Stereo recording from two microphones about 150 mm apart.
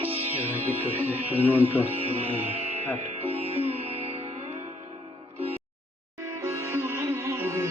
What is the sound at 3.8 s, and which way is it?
Music, 45° right (ahead or behind).